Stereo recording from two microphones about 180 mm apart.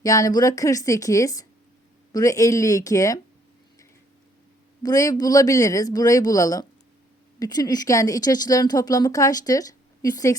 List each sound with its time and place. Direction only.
0.0 s a woman's voice: 20° left (ahead or behind)
4.8 s a woman's voice: 20° left (ahead or behind)